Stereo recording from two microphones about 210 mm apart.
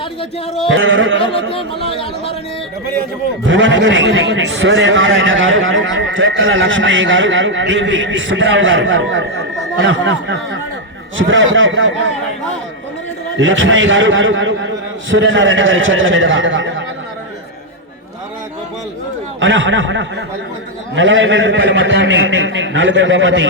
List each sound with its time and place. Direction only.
0.2 s speech: 25° left (ahead or behind)
0.7 s a man's voice: 65° right (ahead or behind)
1.5 s speech: 25° left (ahead or behind)
3.4 s a man's voice: 65° right (ahead or behind)
13.3 s a man's voice: 65° right (ahead or behind)
19.4 s a man's voice: 65° right (ahead or behind)